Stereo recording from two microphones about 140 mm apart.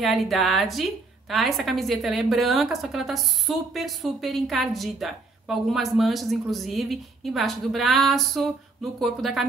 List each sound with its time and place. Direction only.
0.0 s a woman's voice: centre (ahead or behind)